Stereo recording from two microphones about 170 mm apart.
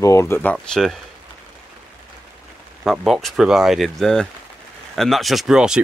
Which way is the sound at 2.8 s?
Centre (ahead or behind).